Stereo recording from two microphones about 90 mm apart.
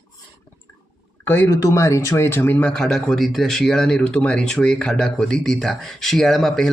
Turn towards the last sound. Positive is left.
turn(degrees=5)  # may be behind; listen again after turning